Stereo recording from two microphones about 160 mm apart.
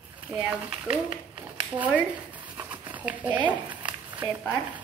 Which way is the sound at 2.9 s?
10° right (ahead or behind).